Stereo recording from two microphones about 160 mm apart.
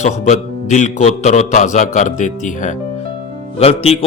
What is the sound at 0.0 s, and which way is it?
A man's voice, 50° left (ahead or behind).